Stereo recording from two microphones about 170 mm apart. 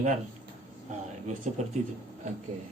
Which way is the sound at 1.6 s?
45° right (ahead or behind).